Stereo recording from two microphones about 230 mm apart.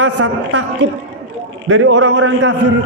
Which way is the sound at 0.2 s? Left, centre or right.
Right.